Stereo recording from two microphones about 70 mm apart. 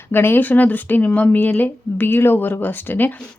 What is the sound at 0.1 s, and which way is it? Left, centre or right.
Speech, left.